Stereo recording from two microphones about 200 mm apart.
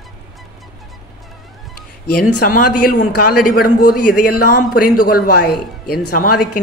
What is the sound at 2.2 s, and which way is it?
Speech, 45° left (ahead or behind).